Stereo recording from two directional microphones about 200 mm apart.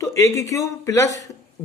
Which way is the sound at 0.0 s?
15° left (ahead or behind).